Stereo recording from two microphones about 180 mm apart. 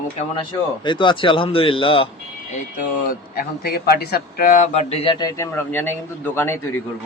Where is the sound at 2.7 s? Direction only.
50° left (ahead or behind).